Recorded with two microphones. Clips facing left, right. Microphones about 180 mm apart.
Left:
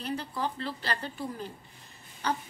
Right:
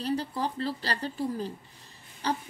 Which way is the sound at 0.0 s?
35° right (ahead or behind).